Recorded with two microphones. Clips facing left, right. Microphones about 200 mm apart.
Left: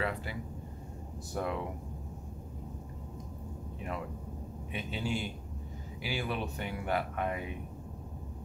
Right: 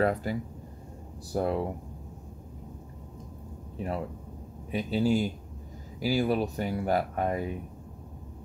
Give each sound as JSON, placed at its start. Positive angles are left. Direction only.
{"t": 0.0, "sound": "speech", "side_deg": -40}
{"t": 3.7, "sound": "speech", "side_deg": -35}